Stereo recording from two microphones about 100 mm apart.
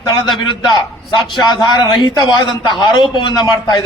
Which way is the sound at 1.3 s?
50° left (ahead or behind).